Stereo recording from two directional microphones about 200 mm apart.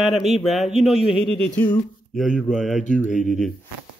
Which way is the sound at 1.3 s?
10° left (ahead or behind).